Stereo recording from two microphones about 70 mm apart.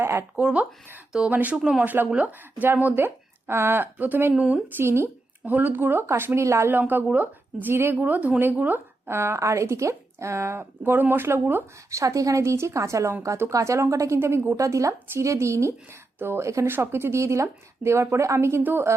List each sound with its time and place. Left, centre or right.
0.0 s a sound: right
0.3 s speech: centre
1.5 s speech: centre
1.8 s speech: right
2.9 s speech: right
4.4 s speech: centre
4.8 s speech: right
5.5 s speech: right
6.7 s speech: right
7.9 s speech: right
9.0 s speech: right
11.9 s a woman's voice: right
13.5 s a woman's voice: right